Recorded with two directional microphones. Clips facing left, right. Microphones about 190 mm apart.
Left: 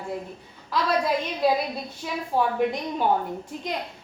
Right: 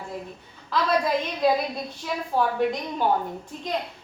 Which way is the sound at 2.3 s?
15° left (ahead or behind).